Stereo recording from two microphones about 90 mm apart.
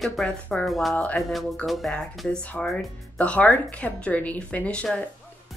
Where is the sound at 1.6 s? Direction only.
Centre (ahead or behind).